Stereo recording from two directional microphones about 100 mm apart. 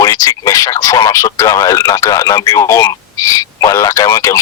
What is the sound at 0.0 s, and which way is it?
Speech, 35° left (ahead or behind).